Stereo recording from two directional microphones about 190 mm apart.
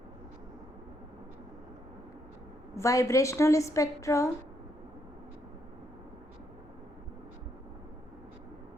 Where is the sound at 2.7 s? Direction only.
15° left (ahead or behind).